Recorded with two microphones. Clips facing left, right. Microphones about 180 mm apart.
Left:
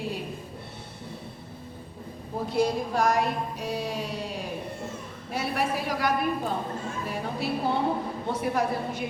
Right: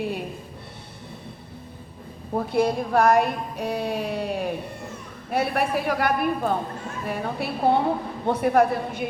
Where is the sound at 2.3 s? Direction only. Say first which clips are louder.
Right 3 dB; 60° right (ahead or behind).